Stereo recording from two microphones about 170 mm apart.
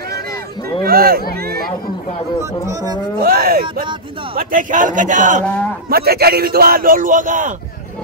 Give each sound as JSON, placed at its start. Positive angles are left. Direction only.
{"t": 0.8, "sound": "speech", "side_deg": -60}
{"t": 2.6, "sound": "speech", "side_deg": -20}
{"t": 3.2, "sound": "a man's voice", "side_deg": -60}
{"t": 5.9, "sound": "speech", "side_deg": -65}